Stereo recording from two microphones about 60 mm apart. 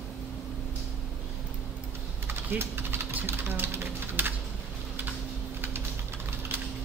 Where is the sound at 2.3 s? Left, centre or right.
Right.